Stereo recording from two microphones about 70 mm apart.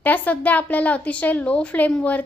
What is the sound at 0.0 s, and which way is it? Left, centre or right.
Speech, left.